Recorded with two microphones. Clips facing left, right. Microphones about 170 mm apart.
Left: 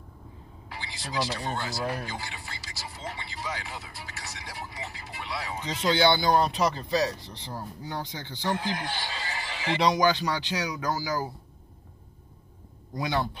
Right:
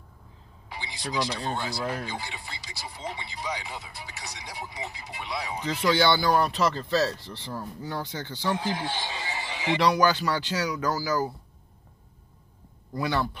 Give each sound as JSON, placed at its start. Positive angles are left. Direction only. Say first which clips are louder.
{"t": 0.7, "sound": "vehicle", "louder": "right 2 dB", "side_deg": -15}
{"t": 1.8, "sound": "speech", "louder": "even", "side_deg": 15}
{"t": 2.0, "sound": "speech", "louder": "right 2 dB", "side_deg": -15}
{"t": 5.7, "sound": "speech", "louder": "right 1 dB", "side_deg": 15}
{"t": 8.4, "sound": "speech", "louder": "right 1 dB", "side_deg": -15}
{"t": 9.8, "sound": "speech", "louder": "right 1 dB", "side_deg": 20}
{"t": 12.9, "sound": "speech", "louder": "right 1 dB", "side_deg": 20}